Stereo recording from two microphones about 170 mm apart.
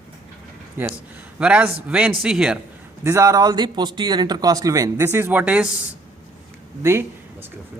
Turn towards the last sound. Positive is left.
turn(degrees=-15)  # may be behind; listen again after turning